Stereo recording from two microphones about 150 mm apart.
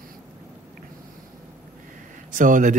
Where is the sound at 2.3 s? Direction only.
60° right (ahead or behind).